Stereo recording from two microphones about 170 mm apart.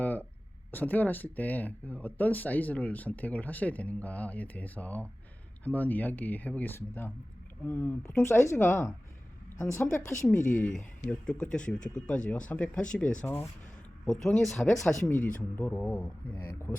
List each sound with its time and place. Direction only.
0.0 s a sound: 10° left (ahead or behind)
0.7 s speech: 10° left (ahead or behind)
10.3 s speech: 50° left (ahead or behind)
10.6 s speech: 5° left (ahead or behind)